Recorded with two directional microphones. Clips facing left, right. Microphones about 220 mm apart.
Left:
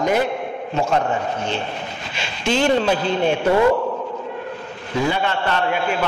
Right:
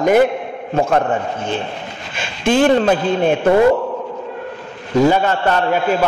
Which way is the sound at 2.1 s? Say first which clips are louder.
Right 6 dB; 50° right (ahead or behind).